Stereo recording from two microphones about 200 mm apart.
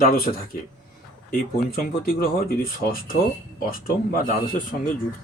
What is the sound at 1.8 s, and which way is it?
Speech, 50° left (ahead or behind).